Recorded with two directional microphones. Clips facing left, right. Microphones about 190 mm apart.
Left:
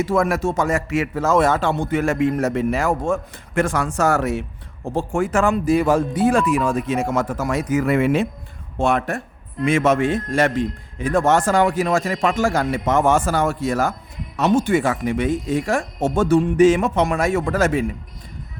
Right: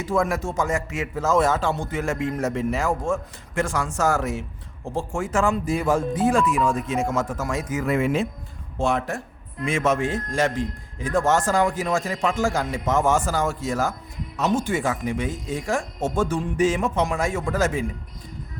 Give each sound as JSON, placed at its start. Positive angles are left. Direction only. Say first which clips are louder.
{"t": 0.0, "sound": "speech", "louder": "left 4 dB", "side_deg": 75}